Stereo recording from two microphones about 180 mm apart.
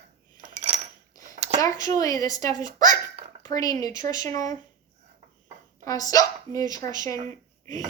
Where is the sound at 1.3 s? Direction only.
35° right (ahead or behind).